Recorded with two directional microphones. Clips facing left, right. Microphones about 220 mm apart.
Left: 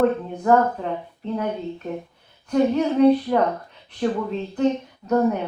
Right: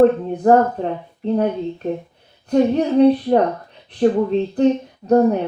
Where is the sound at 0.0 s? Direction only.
35° right (ahead or behind).